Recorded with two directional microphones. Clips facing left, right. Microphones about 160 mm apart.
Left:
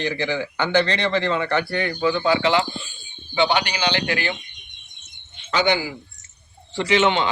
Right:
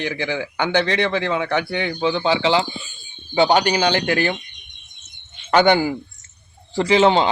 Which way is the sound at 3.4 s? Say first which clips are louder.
Right 5 dB; 40° right (ahead or behind).